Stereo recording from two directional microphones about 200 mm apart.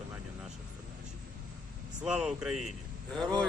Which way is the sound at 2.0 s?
5° right (ahead or behind).